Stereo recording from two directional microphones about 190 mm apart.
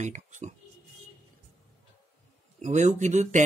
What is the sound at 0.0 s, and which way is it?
Speech, 40° right (ahead or behind).